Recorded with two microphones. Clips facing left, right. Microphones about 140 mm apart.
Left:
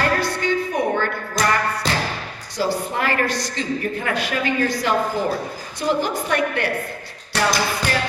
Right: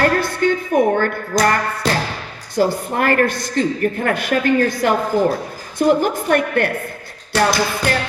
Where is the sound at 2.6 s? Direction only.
50° right (ahead or behind).